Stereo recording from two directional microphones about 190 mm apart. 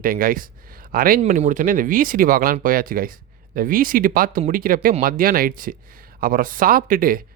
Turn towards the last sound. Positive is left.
turn(degrees=-45)  # may be behind; listen again after turning